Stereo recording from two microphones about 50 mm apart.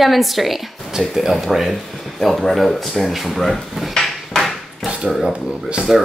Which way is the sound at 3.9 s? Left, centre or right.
Centre.